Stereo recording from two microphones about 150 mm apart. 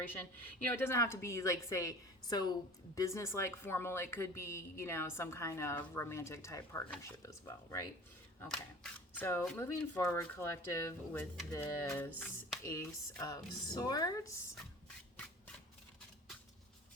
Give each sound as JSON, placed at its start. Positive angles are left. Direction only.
{"t": 0.0, "sound": "a woman's voice", "side_deg": 10}
{"t": 8.4, "sound": "a woman's voice", "side_deg": 10}